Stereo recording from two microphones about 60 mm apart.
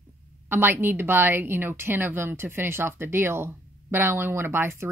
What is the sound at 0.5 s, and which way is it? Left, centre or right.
A woman's voice, right.